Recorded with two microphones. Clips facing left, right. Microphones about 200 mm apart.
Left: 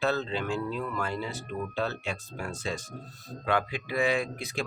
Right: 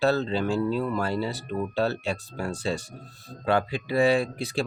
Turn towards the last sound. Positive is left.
turn(degrees=-30)  # may be behind; listen again after turning